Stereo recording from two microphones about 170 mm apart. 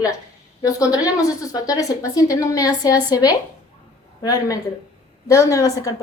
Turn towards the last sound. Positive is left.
turn(degrees=20)  # may be behind; listen again after turning